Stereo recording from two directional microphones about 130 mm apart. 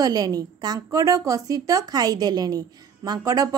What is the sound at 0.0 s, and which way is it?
A woman's voice, 30° right (ahead or behind).